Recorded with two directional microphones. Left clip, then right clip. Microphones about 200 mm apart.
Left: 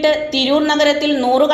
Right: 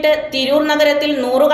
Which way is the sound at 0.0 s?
40° left (ahead or behind).